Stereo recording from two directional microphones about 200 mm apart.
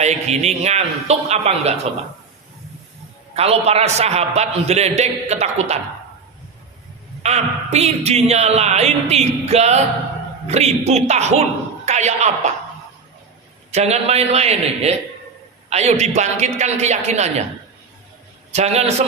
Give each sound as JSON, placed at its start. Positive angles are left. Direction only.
{"t": 0.0, "sound": "speech", "side_deg": -35}
{"t": 3.3, "sound": "speech", "side_deg": -30}
{"t": 7.2, "sound": "speech", "side_deg": -35}
{"t": 13.7, "sound": "speech", "side_deg": -35}
{"t": 18.5, "sound": "speech", "side_deg": -35}